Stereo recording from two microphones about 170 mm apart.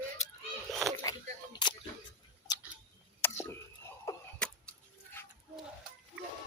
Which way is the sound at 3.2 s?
15° left (ahead or behind).